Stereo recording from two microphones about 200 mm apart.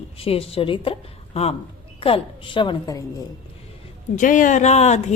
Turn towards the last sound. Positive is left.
turn(degrees=35)  # may be behind; listen again after turning